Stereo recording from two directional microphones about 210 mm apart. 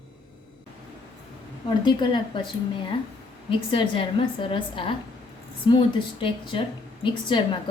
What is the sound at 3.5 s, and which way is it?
A woman's voice, 25° left (ahead or behind).